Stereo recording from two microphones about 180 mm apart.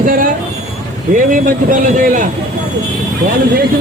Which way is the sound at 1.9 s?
45° right (ahead or behind).